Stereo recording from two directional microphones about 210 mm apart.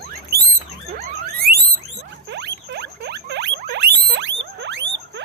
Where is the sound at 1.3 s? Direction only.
45° right (ahead or behind).